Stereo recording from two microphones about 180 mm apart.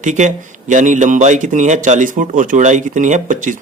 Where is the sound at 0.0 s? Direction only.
45° right (ahead or behind).